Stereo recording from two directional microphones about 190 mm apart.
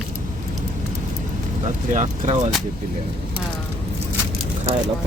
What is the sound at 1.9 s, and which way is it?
Speech, 40° right (ahead or behind).